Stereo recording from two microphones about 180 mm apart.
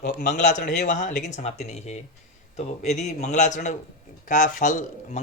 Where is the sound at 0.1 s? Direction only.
45° left (ahead or behind).